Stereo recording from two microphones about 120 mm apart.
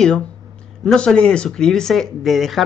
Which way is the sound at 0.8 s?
10° left (ahead or behind).